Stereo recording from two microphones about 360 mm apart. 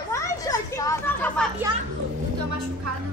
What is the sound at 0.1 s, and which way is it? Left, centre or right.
Children playing, centre.